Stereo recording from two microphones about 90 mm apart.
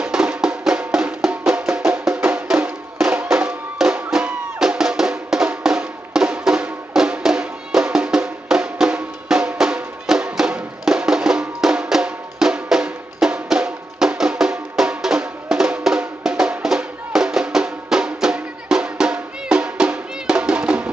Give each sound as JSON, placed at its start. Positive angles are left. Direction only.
{"t": 0.0, "sound": "music", "side_deg": -10}